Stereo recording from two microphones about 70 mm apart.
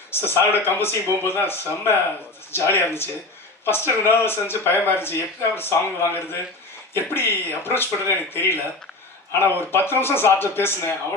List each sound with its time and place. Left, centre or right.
0.1 s speech: left